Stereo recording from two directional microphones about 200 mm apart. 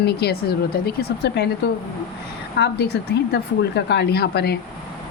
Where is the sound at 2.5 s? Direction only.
60° left (ahead or behind).